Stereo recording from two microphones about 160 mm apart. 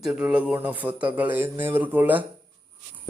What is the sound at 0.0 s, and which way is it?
A man's voice, 5° right (ahead or behind).